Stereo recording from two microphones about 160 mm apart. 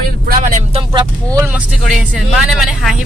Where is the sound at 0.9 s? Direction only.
25° right (ahead or behind).